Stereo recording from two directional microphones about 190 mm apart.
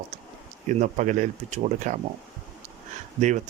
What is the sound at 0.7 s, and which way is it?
Speech, 40° right (ahead or behind).